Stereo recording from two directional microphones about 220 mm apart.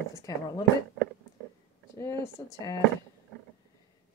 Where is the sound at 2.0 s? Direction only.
10° left (ahead or behind).